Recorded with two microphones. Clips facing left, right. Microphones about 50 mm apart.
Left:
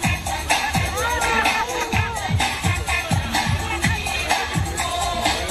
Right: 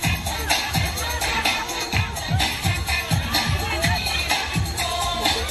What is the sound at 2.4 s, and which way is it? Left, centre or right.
Music, left.